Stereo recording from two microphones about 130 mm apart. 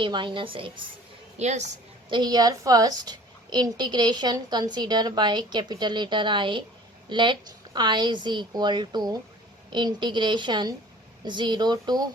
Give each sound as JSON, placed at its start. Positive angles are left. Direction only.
{"t": 0.0, "sound": "a child's voice", "side_deg": -40}
{"t": 1.4, "sound": "a woman's voice", "side_deg": -60}
{"t": 2.0, "sound": "a child's voice", "side_deg": -35}